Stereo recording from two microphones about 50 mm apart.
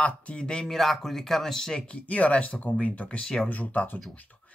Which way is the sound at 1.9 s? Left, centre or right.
Left.